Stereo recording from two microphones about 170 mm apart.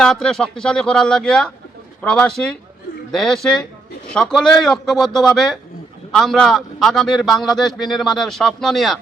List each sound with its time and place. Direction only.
0.0 s a man's voice: 5° left (ahead or behind)